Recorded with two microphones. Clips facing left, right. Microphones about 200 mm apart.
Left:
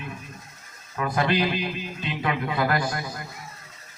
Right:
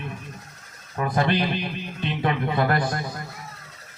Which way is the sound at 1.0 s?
30° right (ahead or behind).